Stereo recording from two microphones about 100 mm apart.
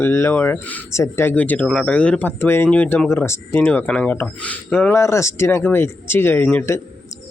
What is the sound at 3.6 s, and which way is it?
Speech, 15° left (ahead or behind).